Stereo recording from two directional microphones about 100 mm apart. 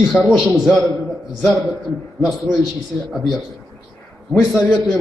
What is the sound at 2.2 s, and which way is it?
A man's voice, 5° right (ahead or behind).